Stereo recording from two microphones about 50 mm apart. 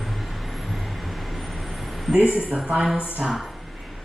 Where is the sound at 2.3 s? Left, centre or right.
Right.